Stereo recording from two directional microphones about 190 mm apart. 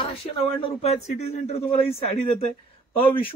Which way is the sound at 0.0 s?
30° left (ahead or behind).